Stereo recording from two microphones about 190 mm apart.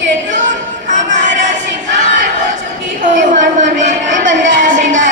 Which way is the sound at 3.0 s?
40° right (ahead or behind).